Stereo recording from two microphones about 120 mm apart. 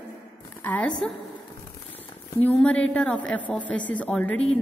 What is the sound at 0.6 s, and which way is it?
Speech, 10° left (ahead or behind).